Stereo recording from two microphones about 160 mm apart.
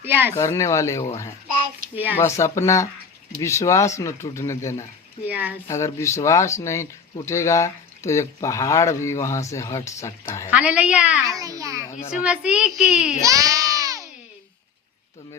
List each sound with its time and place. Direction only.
0.0 s a woman's voice: 15° right (ahead or behind)
0.3 s speech: 20° left (ahead or behind)
1.8 s a sound: 60° right (ahead or behind)
2.1 s speech: 15° left (ahead or behind)
5.2 s a woman's voice: 10° right (ahead or behind)
5.6 s speech: 20° left (ahead or behind)
10.5 s a woman's voice: 10° right (ahead or behind)
11.3 s a child's voice: 20° right (ahead or behind)
12.2 s a child's voice: 5° right (ahead or behind)
13.2 s a sound: 20° right (ahead or behind)